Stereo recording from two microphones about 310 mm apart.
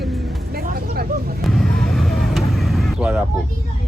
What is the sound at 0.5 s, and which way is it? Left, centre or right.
Speech, right.